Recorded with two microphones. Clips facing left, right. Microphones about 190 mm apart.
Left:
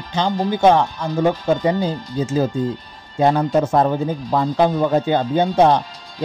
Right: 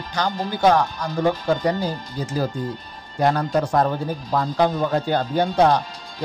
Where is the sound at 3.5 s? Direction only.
25° left (ahead or behind).